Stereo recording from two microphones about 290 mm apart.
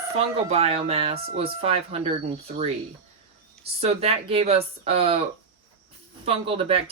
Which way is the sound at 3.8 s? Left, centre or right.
Right.